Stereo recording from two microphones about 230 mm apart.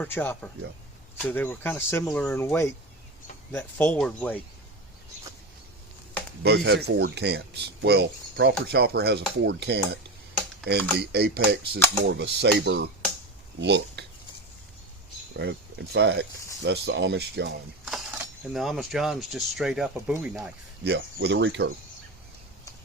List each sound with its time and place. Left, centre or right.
0.0 s speech: centre
6.4 s speech: right
15.3 s speech: right
17.8 s speech: centre
20.8 s speech: right